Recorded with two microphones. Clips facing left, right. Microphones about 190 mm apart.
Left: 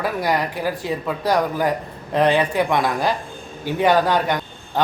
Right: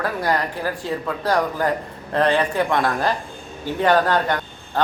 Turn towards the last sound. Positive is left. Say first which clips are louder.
# even
turn(degrees=15)  # may be behind; listen again after turning